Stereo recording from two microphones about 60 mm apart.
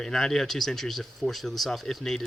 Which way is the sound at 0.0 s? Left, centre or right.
Centre.